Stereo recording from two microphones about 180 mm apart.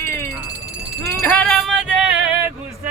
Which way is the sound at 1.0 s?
15° left (ahead or behind).